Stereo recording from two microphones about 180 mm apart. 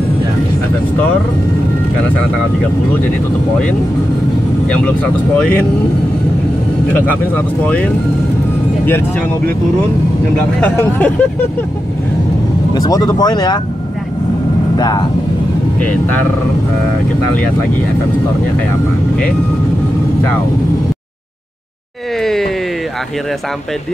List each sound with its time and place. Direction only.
4.6 s speech: 5° left (ahead or behind)
6.9 s speech: 10° left (ahead or behind)
10.6 s speech: 10° left (ahead or behind)
12.7 s speech: 20° left (ahead or behind)
14.8 s speech: 20° left (ahead or behind)
22.2 s a sound: centre (ahead or behind)